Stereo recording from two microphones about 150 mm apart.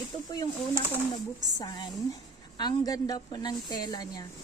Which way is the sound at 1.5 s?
30° left (ahead or behind).